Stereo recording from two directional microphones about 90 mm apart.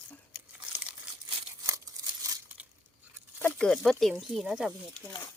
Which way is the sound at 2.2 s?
45° right (ahead or behind).